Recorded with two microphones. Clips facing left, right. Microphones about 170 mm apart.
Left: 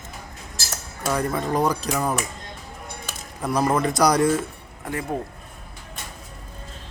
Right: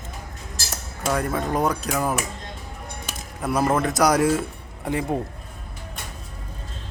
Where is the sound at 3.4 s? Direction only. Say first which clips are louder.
Even; 5° right (ahead or behind).